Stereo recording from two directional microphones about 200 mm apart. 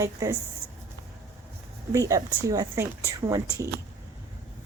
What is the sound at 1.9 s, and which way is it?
Speech, 15° right (ahead or behind).